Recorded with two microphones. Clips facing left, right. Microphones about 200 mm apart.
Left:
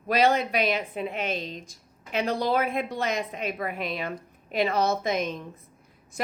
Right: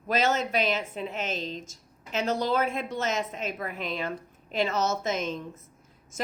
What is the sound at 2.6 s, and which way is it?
A woman's voice, 55° left (ahead or behind).